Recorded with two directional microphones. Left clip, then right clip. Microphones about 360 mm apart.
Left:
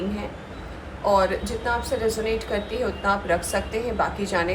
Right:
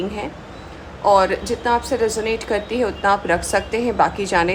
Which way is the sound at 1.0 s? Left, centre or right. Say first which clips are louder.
Right 6 dB; right.